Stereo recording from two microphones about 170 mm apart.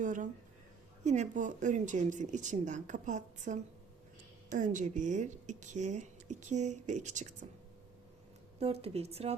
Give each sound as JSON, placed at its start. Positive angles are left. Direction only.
{"t": 0.0, "sound": "speech", "side_deg": -50}
{"t": 8.5, "sound": "a woman's voice", "side_deg": -35}